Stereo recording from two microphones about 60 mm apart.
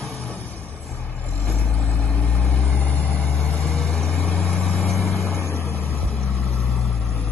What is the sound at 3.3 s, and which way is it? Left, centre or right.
Vehicle, centre.